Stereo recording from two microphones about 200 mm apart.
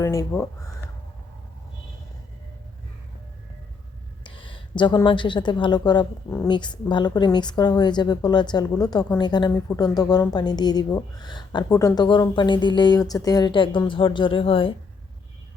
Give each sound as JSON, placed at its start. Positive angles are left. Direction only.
{"t": 0.0, "sound": "speech", "side_deg": 15}
{"t": 4.2, "sound": "a woman's voice", "side_deg": 25}